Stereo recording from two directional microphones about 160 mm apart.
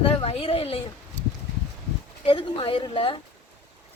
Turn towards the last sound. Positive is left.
turn(degrees=30)  # may be behind; listen again after turning